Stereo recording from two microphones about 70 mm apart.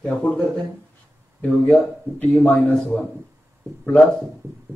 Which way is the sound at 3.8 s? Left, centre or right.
Centre.